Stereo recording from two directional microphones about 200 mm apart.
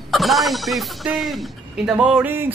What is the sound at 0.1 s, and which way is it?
Speech, centre (ahead or behind).